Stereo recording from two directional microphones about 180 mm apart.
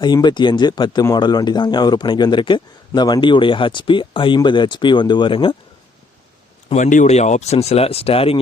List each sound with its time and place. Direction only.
0.0 s speech: 25° left (ahead or behind)
6.7 s speech: 40° left (ahead or behind)